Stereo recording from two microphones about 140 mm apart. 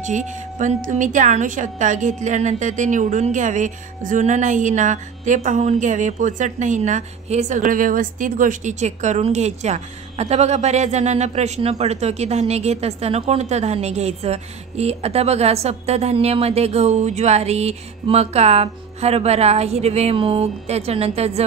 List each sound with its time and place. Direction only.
0.0 s a woman's voice: 60° right (ahead or behind)